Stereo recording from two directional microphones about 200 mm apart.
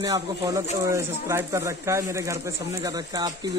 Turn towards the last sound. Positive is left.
turn(degrees=-20)  # may be behind; listen again after turning